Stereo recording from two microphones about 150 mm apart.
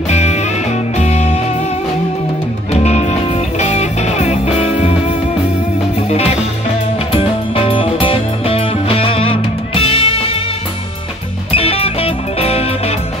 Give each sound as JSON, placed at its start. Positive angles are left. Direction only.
{"t": 0.1, "sound": "music", "side_deg": 50}
{"t": 2.7, "sound": "music", "side_deg": 45}
{"t": 6.0, "sound": "music", "side_deg": 45}
{"t": 11.5, "sound": "music", "side_deg": 40}